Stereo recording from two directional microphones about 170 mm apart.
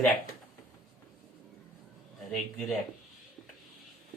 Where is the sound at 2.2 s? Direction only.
Centre (ahead or behind).